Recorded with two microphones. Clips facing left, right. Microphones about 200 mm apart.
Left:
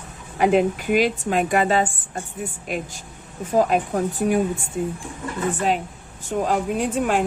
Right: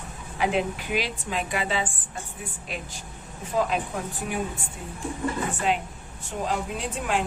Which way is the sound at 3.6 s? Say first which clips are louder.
Left 7 dB; 45° left (ahead or behind).